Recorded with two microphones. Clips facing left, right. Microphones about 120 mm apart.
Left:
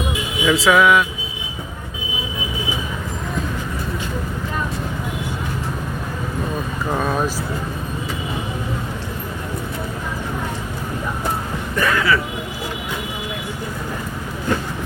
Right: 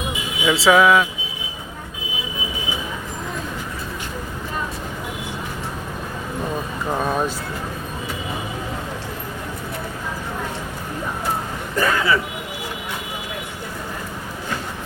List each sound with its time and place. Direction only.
0.4 s speech: 30° right (ahead or behind)
6.9 s speech: 5° right (ahead or behind)
11.8 s speech: 30° right (ahead or behind)